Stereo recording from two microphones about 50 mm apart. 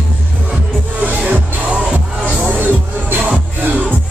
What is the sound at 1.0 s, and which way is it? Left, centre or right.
Music, right.